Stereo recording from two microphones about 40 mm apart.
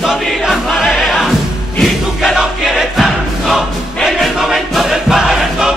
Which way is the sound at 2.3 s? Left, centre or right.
Centre.